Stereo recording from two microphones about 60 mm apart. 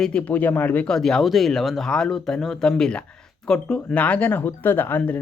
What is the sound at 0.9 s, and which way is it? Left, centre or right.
Speech, centre.